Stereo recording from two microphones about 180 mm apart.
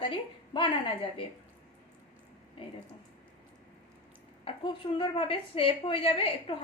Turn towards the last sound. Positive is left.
turn(degrees=30)  # may be behind; listen again after turning